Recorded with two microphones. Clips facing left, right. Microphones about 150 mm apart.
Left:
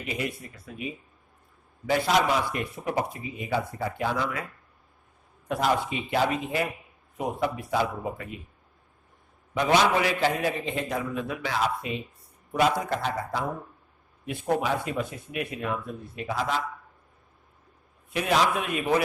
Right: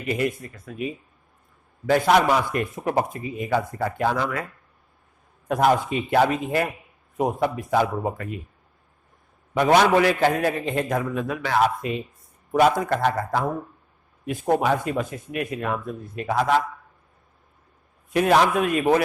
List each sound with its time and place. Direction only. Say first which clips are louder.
0.1 s speech: right 8 dB; 50° right (ahead or behind)
1.9 s speech: right 5 dB; 55° right (ahead or behind)
5.5 s speech: right 6 dB; 50° right (ahead or behind)
9.6 s a man's voice: right 5 dB; 55° right (ahead or behind)
14.3 s speech: right 5 dB; 45° right (ahead or behind)
16.2 s a man's voice: right 8 dB; 60° right (ahead or behind)
18.1 s speech: right 6 dB; 55° right (ahead or behind)